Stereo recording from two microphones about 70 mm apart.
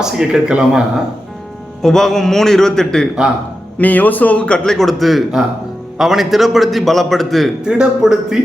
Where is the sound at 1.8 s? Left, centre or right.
Centre.